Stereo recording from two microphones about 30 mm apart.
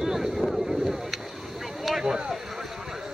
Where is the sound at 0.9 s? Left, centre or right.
Centre.